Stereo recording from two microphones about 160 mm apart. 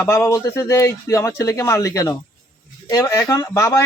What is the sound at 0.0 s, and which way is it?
Speech, 20° left (ahead or behind).